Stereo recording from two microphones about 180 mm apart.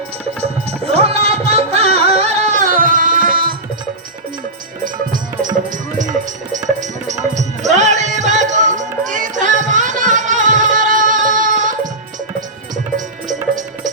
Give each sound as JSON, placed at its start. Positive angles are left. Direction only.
{"t": 0.9, "sound": "music", "side_deg": -35}
{"t": 5.7, "sound": "music", "side_deg": -45}
{"t": 13.2, "sound": "music", "side_deg": -45}